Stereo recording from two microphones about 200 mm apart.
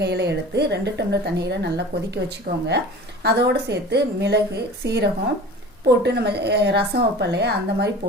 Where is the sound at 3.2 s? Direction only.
55° right (ahead or behind).